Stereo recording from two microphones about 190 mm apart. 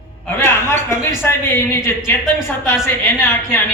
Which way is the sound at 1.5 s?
10° left (ahead or behind).